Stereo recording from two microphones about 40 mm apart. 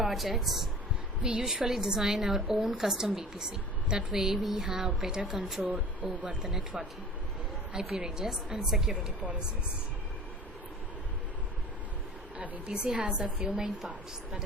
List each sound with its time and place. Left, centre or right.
0.0 s a woman's voice: centre
1.2 s a woman's voice: centre
3.3 s a woman's voice: centre
5.6 s speech: right
6.4 s a woman's voice: centre
7.9 s a woman's voice: centre
12.6 s a woman's voice: right